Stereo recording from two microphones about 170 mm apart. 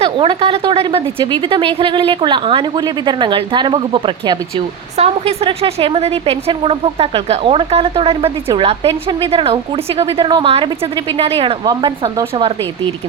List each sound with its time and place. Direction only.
0.0 s a woman's voice: 30° right (ahead or behind)